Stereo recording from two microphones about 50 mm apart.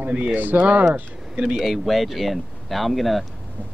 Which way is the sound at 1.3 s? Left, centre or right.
Centre.